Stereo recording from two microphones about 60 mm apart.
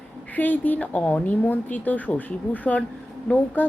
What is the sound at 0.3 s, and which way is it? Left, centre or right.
A woman's voice, left.